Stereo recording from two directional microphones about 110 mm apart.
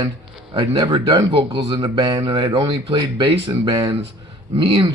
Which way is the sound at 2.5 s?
45° right (ahead or behind).